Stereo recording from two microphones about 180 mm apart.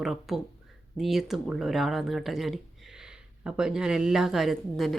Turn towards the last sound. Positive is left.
turn(degrees=0)  # may be behind; listen again after turning